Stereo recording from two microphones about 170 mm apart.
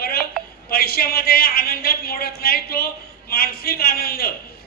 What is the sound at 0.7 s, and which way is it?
A man's voice, 65° left (ahead or behind).